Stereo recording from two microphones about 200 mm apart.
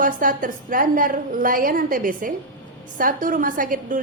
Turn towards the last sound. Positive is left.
turn(degrees=-45)  # may be behind; listen again after turning